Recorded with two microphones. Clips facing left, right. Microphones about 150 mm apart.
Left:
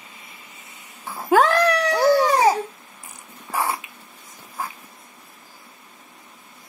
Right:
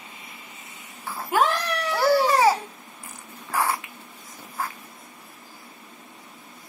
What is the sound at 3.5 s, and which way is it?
Dog, 20° left (ahead or behind).